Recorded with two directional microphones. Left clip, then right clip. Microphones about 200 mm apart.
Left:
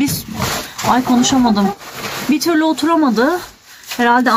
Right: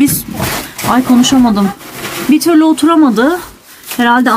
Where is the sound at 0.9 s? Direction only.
Centre (ahead or behind).